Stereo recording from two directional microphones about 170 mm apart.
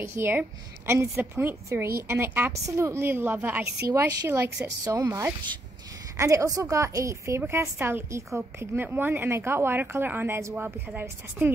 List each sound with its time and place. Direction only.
0.0 s speech: 15° right (ahead or behind)